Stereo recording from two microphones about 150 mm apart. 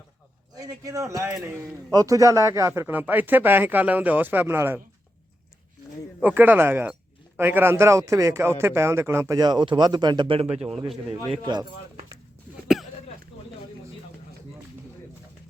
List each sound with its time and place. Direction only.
0.5 s speech: 25° right (ahead or behind)
6.2 s a man's voice: 10° right (ahead or behind); by 10.5 s 35° right (ahead or behind)
10.5 s a man's voice: 5° right (ahead or behind)